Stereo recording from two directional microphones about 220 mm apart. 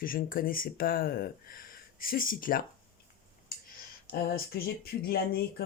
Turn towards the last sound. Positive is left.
turn(degrees=45)  # may be behind; listen again after turning